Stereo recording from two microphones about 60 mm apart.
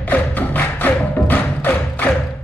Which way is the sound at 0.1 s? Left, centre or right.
Left.